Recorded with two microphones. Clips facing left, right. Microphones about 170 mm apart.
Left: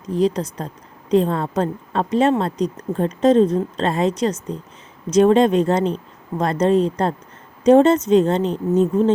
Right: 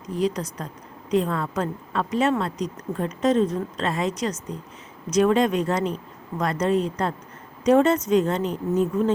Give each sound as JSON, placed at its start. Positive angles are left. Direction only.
{"t": 0.2, "sound": "a woman's voice", "side_deg": 30}